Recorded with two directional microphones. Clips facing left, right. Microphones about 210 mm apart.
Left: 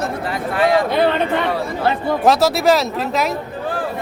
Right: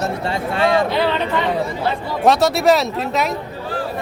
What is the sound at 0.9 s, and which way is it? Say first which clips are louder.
Speech: left 3 dB; 50° left (ahead or behind).